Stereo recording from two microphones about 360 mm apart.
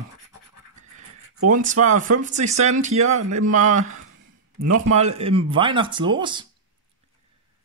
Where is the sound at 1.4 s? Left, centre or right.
Right.